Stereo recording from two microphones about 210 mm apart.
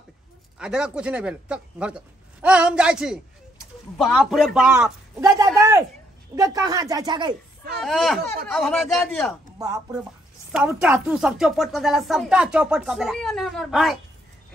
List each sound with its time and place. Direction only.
0.6 s speech: 5° right (ahead or behind)
5.4 s a sound: 15° right (ahead or behind)
6.3 s speech: 15° right (ahead or behind)
7.8 s speech: centre (ahead or behind)
10.5 s speech: 5° right (ahead or behind)